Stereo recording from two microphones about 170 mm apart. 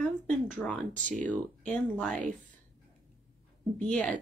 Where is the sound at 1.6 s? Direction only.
5° left (ahead or behind).